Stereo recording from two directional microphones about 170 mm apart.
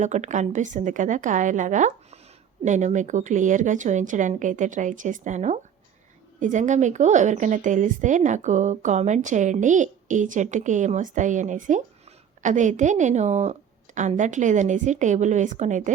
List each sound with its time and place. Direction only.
0.0 s a woman's voice: 45° right (ahead or behind)